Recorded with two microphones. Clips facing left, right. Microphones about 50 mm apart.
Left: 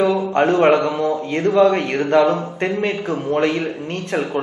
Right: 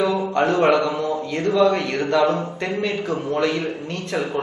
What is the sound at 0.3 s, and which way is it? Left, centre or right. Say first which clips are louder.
A man's voice: left 3 dB; left.